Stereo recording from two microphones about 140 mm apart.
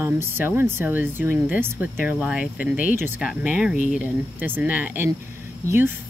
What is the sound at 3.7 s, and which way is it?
Speech, 65° left (ahead or behind).